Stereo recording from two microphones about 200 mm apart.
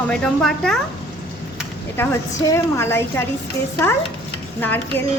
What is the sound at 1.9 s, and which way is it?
A woman's voice, 15° left (ahead or behind).